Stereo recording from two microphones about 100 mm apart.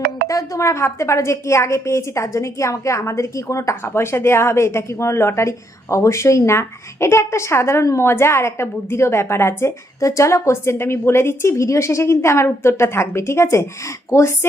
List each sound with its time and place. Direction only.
0.3 s a woman's voice: 35° left (ahead or behind)